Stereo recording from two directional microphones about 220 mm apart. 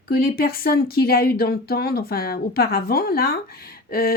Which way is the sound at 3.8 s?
45° left (ahead or behind).